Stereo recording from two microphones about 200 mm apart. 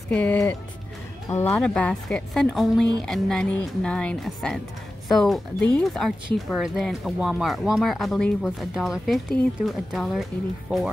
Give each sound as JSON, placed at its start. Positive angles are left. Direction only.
{"t": 0.1, "sound": "speech", "side_deg": 10}